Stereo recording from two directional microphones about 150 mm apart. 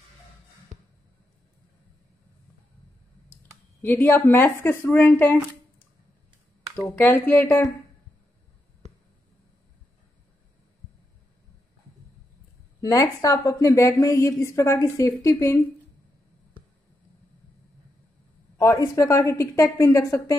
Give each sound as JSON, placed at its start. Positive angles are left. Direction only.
{"t": 3.8, "sound": "speech", "side_deg": 15}
{"t": 6.8, "sound": "speech", "side_deg": 15}
{"t": 12.8, "sound": "a woman's voice", "side_deg": 20}
{"t": 18.6, "sound": "a woman's voice", "side_deg": 20}